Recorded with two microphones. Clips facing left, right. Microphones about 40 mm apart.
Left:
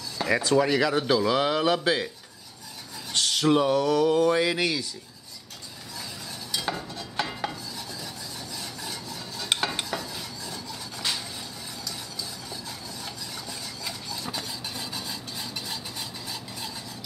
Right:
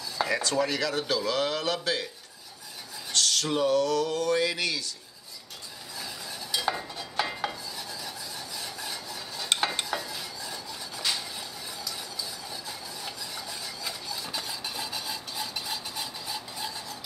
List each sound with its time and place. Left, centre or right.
0.3 s speech: centre
3.1 s speech: centre
6.5 s stir: centre
6.8 s a sound: centre
8.5 s stir: centre
12.6 s a sound: centre